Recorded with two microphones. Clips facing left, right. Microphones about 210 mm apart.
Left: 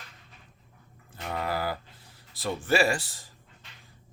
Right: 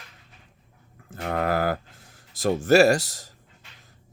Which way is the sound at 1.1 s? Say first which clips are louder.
Right 7 dB; 55° right (ahead or behind).